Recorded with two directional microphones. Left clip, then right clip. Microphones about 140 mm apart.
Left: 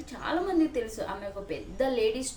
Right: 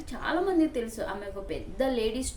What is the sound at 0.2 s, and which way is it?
A woman's voice, 15° right (ahead or behind).